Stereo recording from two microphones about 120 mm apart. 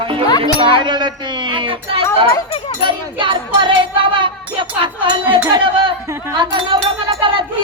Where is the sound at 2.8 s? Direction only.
45° right (ahead or behind).